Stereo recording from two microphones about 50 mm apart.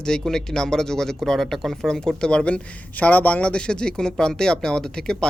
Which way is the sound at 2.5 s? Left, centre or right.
Left.